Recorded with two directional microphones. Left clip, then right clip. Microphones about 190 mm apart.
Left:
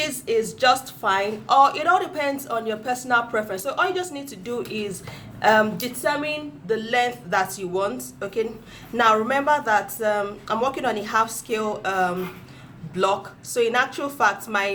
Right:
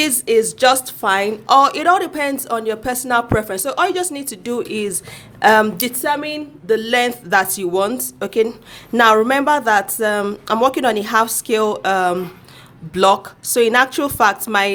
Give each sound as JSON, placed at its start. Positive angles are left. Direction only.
{"t": 0.0, "sound": "a woman's voice", "side_deg": -40}